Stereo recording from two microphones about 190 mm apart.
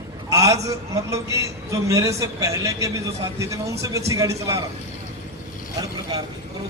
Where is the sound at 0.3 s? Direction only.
15° right (ahead or behind).